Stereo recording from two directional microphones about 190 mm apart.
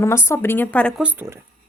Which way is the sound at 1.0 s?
10° right (ahead or behind).